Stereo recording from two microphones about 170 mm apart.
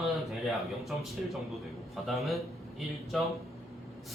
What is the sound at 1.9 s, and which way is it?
A man's voice, centre (ahead or behind).